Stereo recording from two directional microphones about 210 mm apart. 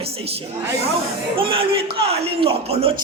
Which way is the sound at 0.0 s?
30° right (ahead or behind).